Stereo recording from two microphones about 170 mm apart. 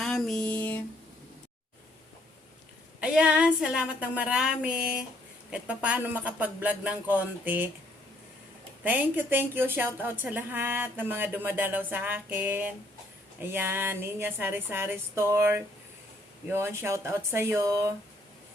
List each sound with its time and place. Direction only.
0.0 s a sound: 5° left (ahead or behind)
3.0 s a woman's voice: 5° right (ahead or behind)
8.8 s a woman's voice: 10° right (ahead or behind)